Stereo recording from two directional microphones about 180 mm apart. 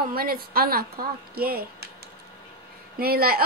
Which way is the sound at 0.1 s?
55° right (ahead or behind).